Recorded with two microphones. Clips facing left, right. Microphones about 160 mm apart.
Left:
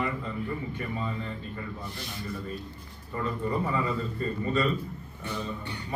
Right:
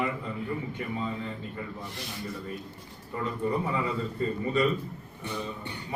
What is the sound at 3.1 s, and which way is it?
A man's voice, 15° right (ahead or behind).